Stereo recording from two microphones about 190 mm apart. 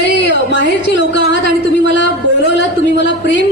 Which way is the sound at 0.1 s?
65° left (ahead or behind).